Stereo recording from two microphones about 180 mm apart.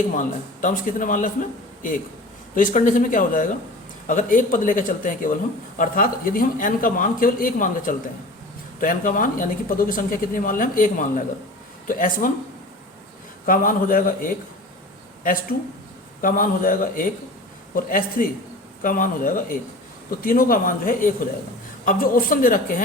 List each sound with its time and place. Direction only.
0.1 s speech: 45° left (ahead or behind)
2.6 s speech: 45° left (ahead or behind)
13.4 s speech: 50° left (ahead or behind)